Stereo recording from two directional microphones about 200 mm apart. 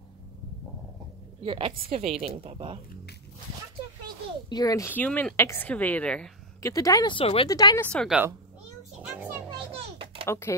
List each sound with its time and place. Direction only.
1.4 s a woman's voice: 25° right (ahead or behind)
4.5 s speech: 20° left (ahead or behind)
6.6 s speech: 15° left (ahead or behind)
7.9 s speech: 5° left (ahead or behind)
9.0 s music: 10° right (ahead or behind)
10.2 s speech: 15° left (ahead or behind)